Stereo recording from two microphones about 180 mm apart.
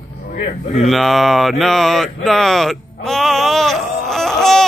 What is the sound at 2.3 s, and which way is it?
Speech, centre (ahead or behind).